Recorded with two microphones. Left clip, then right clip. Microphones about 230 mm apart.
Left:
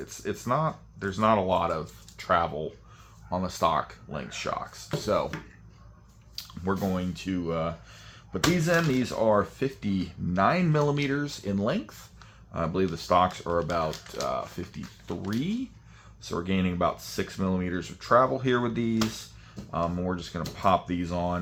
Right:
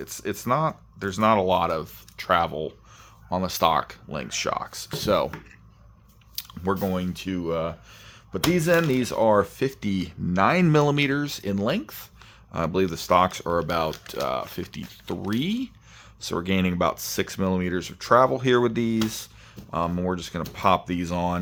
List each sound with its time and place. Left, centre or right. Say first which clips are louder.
0.0 s speech: right 3 dB; right
6.3 s speech: right 4 dB; right